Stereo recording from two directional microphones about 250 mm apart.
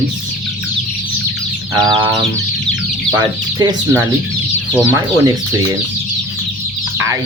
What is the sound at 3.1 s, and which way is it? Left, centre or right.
Speech, centre.